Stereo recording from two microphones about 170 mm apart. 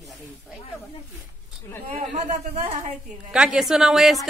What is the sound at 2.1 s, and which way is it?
Speech, 40° right (ahead or behind).